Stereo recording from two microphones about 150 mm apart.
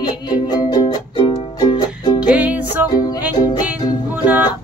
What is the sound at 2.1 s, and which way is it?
Music, 10° right (ahead or behind).